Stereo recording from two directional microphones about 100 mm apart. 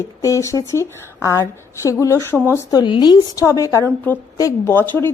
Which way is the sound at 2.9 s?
50° left (ahead or behind).